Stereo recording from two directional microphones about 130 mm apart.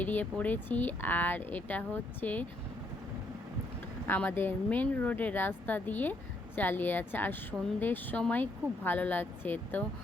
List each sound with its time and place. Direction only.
0.0 s speech: 15° left (ahead or behind)
4.0 s speech: 15° left (ahead or behind)